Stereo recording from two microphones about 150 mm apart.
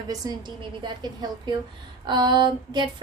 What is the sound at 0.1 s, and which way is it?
A woman's voice, 30° right (ahead or behind).